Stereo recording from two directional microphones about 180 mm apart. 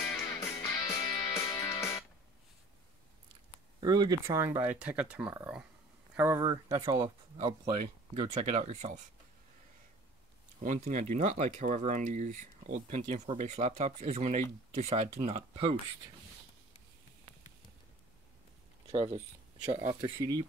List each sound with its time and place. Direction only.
0.0 s music: 15° left (ahead or behind)
3.8 s speech: 20° right (ahead or behind)
8.1 s speech: 35° right (ahead or behind)
10.6 s speech: 45° right (ahead or behind)
18.9 s speech: 35° right (ahead or behind)
19.7 s speech: 20° right (ahead or behind)